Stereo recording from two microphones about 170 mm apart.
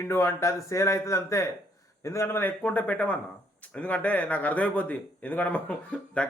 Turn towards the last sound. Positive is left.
turn(degrees=5)  # may be behind; listen again after turning